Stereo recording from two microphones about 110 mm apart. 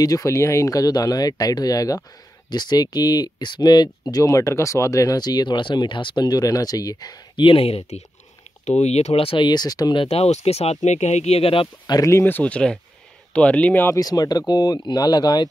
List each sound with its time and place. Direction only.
0.0 s speech: 30° left (ahead or behind)
7.4 s speech: 60° left (ahead or behind)
8.6 s speech: 85° left; by 10.0 s 40° left (ahead or behind)
10.0 s speech: 75° left (ahead or behind)
11.9 s speech: 25° left (ahead or behind)
13.9 s speech: 35° left (ahead or behind)